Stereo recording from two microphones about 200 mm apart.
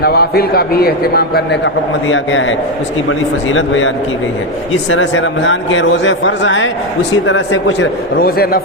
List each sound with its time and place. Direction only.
0.0 s a man's voice: 50° left (ahead or behind)